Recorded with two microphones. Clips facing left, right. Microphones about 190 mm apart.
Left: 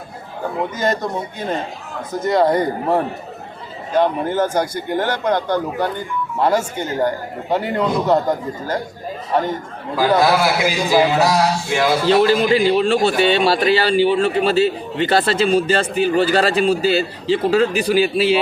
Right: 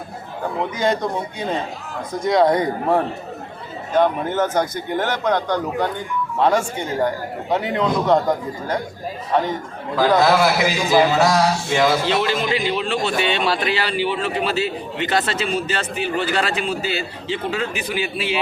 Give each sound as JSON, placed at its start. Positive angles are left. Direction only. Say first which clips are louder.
{"t": 0.8, "sound": "speech", "louder": "right 1 dB", "side_deg": 0}
{"t": 10.2, "sound": "speech", "louder": "even", "side_deg": 5}
{"t": 12.0, "sound": "a man's voice", "louder": "left 6 dB", "side_deg": 40}